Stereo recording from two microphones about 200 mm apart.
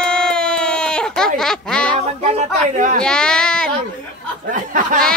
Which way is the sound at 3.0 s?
5° left (ahead or behind).